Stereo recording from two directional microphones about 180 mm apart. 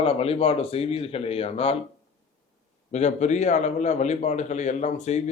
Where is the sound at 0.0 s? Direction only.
35° left (ahead or behind).